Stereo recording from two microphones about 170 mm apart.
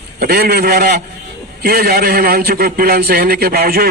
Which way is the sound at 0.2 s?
65° right (ahead or behind).